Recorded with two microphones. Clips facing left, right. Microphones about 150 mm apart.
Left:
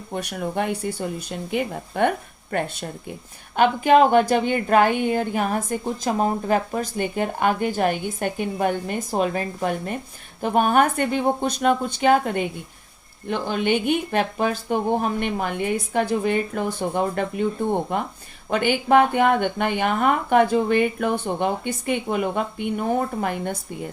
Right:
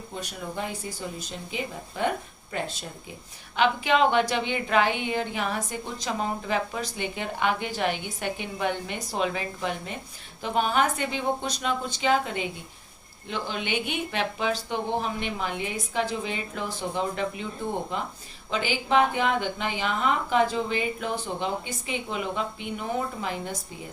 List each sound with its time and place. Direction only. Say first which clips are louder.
0.1 s speech: left 9 dB; 65° left (ahead or behind)
3.5 s a woman's voice: left 7 dB; 45° left (ahead or behind)